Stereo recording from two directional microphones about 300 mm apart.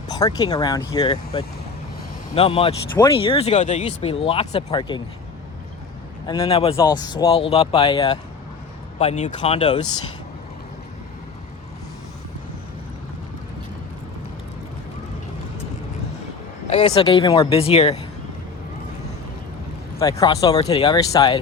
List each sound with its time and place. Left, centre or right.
0.1 s speech: centre
6.2 s speech: centre
16.6 s speech: centre
20.0 s speech: centre